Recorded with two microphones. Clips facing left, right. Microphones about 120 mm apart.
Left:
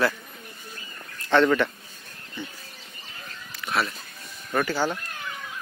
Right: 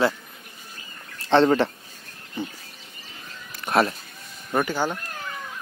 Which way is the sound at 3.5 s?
45° right (ahead or behind).